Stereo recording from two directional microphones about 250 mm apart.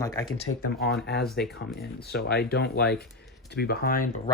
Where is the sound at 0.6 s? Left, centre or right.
Left.